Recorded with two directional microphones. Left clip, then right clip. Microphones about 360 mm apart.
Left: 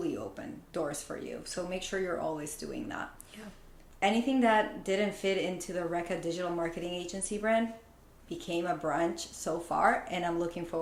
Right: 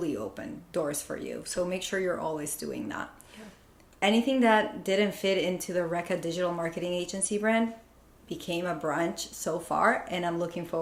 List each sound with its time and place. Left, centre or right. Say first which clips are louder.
0.0 s speech: right 3 dB; centre
4.0 s speech: right 3 dB; centre